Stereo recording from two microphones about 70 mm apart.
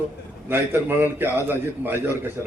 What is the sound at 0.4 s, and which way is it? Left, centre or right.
A man's voice, right.